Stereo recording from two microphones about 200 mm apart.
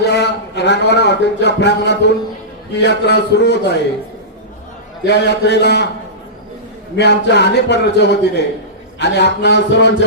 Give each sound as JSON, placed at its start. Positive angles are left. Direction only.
{"t": 0.0, "sound": "a man's voice", "side_deg": 55}
{"t": 5.0, "sound": "a man's voice", "side_deg": 60}
{"t": 6.9, "sound": "a man's voice", "side_deg": 55}